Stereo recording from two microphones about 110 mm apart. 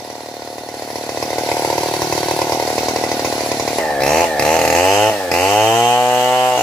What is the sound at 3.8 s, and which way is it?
Chainsaw, 5° left (ahead or behind).